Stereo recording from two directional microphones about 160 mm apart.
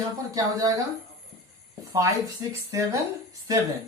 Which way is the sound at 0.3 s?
20° right (ahead or behind).